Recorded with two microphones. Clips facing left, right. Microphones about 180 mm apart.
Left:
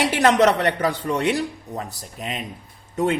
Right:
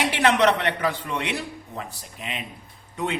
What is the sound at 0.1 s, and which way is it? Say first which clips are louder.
A man's voice: left 2 dB; 40° left (ahead or behind).